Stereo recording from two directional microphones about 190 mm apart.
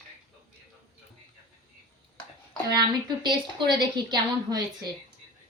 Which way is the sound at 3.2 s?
25° right (ahead or behind).